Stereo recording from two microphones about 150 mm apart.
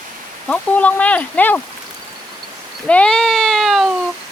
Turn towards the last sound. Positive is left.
turn(degrees=0)  # may be behind; listen again after turning